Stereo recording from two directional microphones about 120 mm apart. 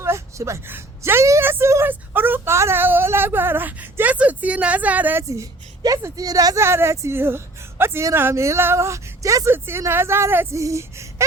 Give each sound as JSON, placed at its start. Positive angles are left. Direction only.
{"t": 0.0, "sound": "a woman's voice", "side_deg": -25}
{"t": 5.3, "sound": "speech", "side_deg": -30}